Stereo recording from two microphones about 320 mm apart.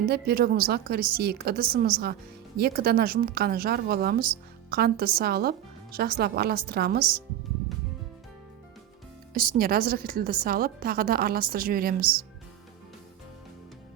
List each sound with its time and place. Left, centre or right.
0.0 s a woman's voice: right
9.3 s a woman's voice: right